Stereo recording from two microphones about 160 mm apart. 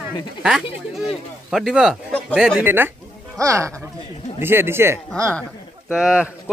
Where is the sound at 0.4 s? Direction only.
5° right (ahead or behind).